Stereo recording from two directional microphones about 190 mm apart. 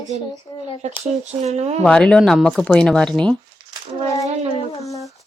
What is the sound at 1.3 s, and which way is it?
Speech, 35° right (ahead or behind).